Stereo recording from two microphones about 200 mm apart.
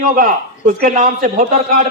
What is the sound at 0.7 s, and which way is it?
A man's voice, 45° right (ahead or behind).